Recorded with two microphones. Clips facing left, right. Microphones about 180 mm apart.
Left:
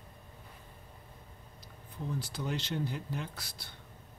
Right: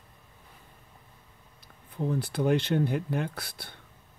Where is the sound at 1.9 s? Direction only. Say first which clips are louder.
Right 9 dB; 60° right (ahead or behind).